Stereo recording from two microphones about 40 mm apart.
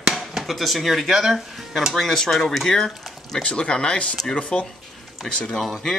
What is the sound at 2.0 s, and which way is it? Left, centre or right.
Speech, centre.